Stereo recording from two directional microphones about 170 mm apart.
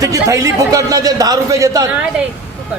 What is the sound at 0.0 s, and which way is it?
A man's voice, 20° right (ahead or behind).